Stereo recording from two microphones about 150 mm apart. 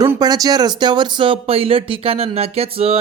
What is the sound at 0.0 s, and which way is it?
Speech, 25° right (ahead or behind).